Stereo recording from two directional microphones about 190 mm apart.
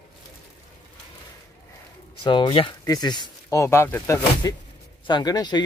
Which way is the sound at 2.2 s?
25° left (ahead or behind).